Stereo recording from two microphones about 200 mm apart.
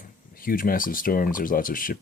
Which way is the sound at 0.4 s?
45° left (ahead or behind).